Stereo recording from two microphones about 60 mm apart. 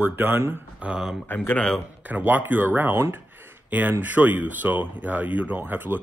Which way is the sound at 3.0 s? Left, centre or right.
Right.